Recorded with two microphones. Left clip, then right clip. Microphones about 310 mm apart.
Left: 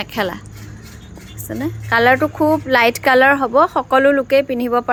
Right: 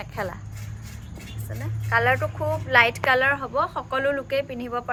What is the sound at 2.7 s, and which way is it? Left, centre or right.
A woman's voice, centre.